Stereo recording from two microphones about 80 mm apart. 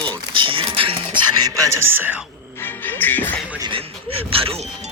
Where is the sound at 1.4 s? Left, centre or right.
Right.